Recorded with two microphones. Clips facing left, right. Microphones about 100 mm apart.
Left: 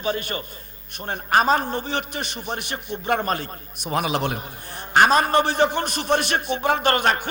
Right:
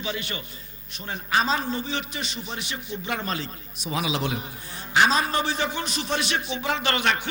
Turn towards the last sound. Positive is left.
turn(degrees=45)  # may be behind; listen again after turning